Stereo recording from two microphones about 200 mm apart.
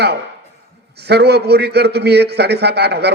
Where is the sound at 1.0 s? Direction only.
55° right (ahead or behind).